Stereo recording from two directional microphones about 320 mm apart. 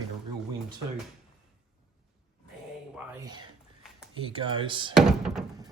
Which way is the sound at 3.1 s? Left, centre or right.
Centre.